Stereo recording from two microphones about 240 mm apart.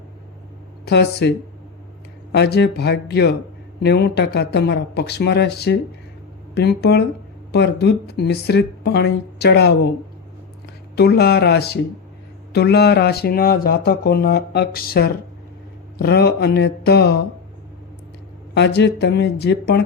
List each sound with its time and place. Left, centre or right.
0.9 s speech: left
2.3 s speech: left
10.9 s speech: left
18.5 s speech: left